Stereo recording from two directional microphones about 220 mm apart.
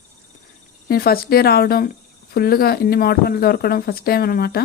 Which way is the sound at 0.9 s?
45° left (ahead or behind).